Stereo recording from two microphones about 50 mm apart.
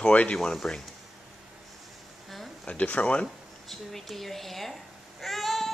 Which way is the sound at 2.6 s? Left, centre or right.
Left.